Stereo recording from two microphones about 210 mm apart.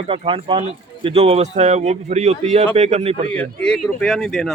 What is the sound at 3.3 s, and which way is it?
Speech, 5° left (ahead or behind).